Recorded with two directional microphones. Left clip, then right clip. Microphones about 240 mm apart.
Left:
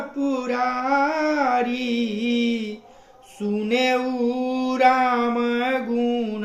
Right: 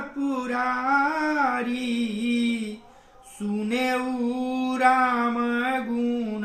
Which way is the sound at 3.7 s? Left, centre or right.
Centre.